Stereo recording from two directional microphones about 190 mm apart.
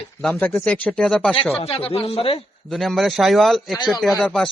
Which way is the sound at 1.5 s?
30° left (ahead or behind).